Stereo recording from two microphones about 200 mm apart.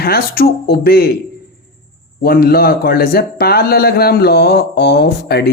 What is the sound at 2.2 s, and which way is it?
Speech, 50° left (ahead or behind).